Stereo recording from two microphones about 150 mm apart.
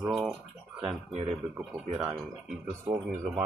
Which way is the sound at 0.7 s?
35° right (ahead or behind).